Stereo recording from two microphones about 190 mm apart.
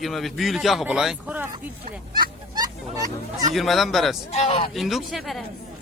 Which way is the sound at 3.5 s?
Centre (ahead or behind).